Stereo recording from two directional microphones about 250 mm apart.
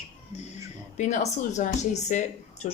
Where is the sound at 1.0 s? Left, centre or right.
Left.